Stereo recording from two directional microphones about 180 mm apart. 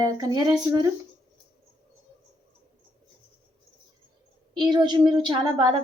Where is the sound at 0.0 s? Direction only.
20° right (ahead or behind).